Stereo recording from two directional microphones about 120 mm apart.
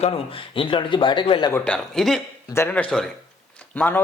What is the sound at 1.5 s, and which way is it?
Speech, 10° left (ahead or behind).